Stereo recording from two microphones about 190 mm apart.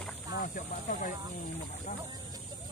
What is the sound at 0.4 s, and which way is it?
Speech, 45° left (ahead or behind).